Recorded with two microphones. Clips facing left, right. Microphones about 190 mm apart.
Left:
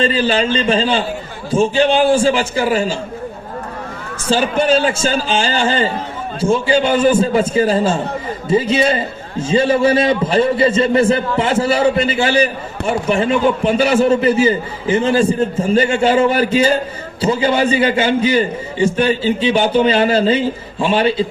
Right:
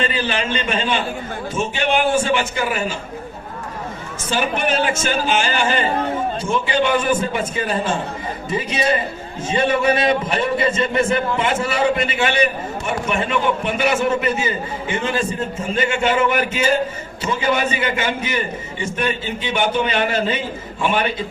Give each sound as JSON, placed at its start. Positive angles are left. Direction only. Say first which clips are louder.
{"t": 0.0, "sound": "a man's voice", "louder": "left 6 dB", "side_deg": 30}
{"t": 4.3, "sound": "a man's voice", "louder": "left 6 dB", "side_deg": 30}